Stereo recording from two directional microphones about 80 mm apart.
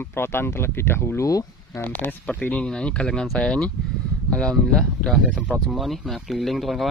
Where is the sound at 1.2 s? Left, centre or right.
Left.